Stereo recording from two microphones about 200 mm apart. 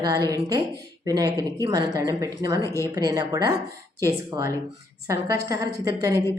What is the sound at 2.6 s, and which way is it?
Speech, 15° left (ahead or behind).